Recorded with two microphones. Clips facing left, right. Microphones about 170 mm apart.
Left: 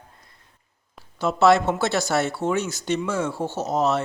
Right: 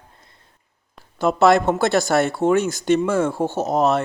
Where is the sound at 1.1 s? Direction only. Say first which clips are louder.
Right 2 dB; 55° right (ahead or behind).